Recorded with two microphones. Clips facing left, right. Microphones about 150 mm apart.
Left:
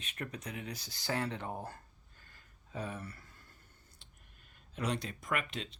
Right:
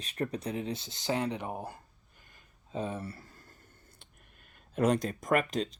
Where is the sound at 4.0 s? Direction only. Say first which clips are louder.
Right 4 dB; 55° right (ahead or behind).